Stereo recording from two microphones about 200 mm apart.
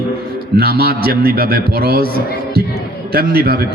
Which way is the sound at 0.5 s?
50° right (ahead or behind).